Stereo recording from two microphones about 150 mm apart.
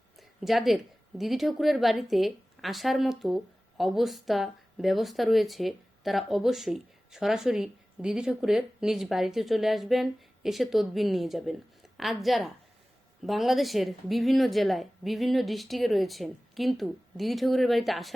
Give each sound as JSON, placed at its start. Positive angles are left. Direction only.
{"t": 0.2, "sound": "a woman's voice", "side_deg": 0}